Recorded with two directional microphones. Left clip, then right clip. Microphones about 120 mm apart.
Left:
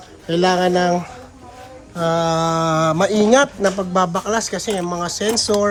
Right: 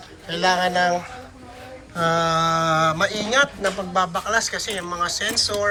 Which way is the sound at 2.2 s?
60° left (ahead or behind).